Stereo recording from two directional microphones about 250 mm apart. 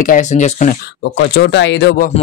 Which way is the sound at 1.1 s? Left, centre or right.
Left.